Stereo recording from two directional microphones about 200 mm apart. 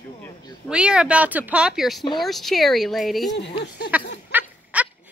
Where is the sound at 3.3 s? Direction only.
60° left (ahead or behind).